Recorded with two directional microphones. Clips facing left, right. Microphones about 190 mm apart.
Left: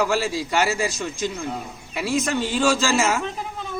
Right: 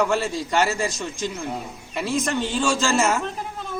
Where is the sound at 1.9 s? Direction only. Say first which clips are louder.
Left 1 dB; 5° left (ahead or behind).